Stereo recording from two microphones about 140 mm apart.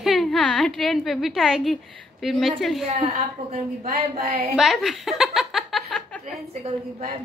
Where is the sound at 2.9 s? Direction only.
55° right (ahead or behind).